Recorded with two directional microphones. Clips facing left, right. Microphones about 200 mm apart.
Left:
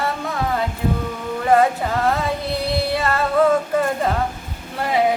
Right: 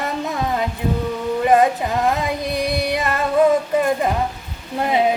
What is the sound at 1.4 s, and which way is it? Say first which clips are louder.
Female singing: even; 15° right (ahead or behind).